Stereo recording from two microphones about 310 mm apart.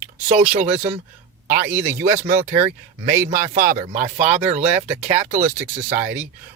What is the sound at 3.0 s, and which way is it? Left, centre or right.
Speech, centre.